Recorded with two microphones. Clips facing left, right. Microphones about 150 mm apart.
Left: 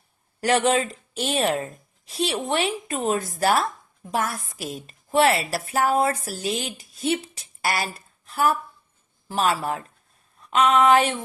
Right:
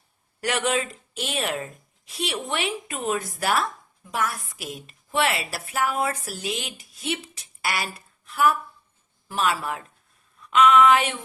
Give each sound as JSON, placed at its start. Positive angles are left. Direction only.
{"t": 0.4, "sound": "a woman's voice", "side_deg": 30}